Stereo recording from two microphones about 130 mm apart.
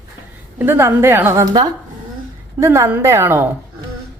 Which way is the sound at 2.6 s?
20° right (ahead or behind).